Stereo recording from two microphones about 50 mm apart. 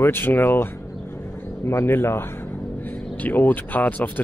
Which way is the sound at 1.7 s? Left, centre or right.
Left.